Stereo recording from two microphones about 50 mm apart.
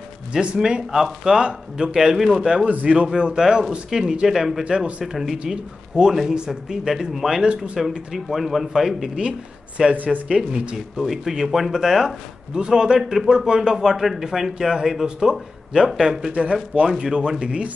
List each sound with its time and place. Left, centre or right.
0.3 s a man's voice: centre
2.7 s speech: right
3.1 s a man's voice: centre
4.6 s speech: right
5.0 s a man's voice: centre
7.4 s speech: centre
8.1 s speech: centre
9.9 s speech: right
10.3 s speech: right
11.0 s speech: centre
12.5 s a man's voice: centre
16.3 s speech: right
16.8 s a man's voice: centre